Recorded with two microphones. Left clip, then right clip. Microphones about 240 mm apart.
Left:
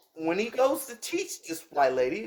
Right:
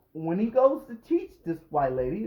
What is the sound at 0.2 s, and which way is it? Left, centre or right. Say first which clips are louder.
Speech: left 2 dB; left.